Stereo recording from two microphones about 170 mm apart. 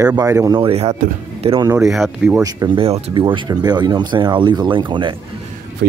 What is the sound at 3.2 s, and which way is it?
Speech, 25° right (ahead or behind).